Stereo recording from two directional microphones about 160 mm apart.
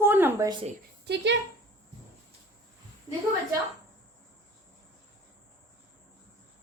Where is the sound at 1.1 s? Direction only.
90° right.